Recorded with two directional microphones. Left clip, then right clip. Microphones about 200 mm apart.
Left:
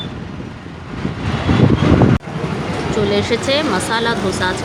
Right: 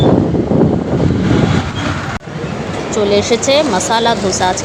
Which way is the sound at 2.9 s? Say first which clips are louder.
Right 5 dB; 15° right (ahead or behind).